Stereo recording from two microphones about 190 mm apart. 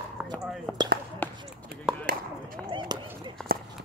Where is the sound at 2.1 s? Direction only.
45° right (ahead or behind).